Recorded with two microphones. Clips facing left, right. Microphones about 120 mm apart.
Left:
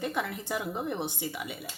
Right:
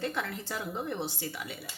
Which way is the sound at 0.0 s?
15° left (ahead or behind).